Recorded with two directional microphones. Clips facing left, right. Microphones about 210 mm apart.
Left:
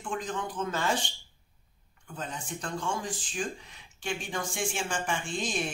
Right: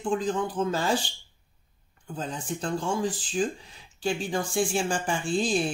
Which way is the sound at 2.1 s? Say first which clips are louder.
Right 5 dB; 30° right (ahead or behind).